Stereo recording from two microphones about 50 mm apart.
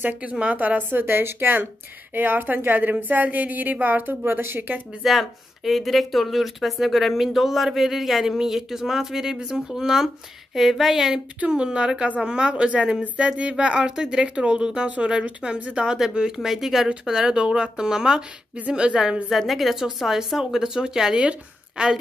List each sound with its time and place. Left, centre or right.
0.0 s a woman's voice: right
5.0 s speech: centre
11.3 s speech: centre
19.3 s speech: centre